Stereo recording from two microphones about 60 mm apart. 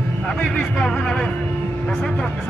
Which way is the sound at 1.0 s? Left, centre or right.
Centre.